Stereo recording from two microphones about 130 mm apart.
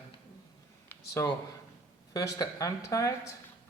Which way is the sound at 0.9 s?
20° left (ahead or behind).